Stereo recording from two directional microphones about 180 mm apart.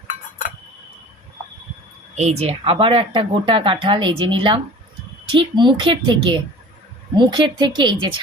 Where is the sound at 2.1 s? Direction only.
35° right (ahead or behind).